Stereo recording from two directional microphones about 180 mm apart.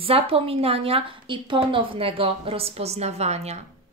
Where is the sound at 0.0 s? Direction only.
30° right (ahead or behind).